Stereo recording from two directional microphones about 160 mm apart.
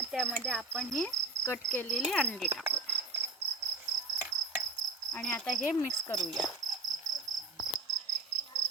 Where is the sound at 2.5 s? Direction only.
15° right (ahead or behind).